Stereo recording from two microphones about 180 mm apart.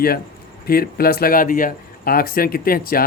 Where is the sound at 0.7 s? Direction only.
55° left (ahead or behind).